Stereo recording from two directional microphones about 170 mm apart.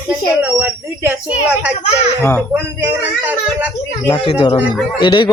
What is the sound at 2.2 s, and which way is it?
Speech, 15° left (ahead or behind).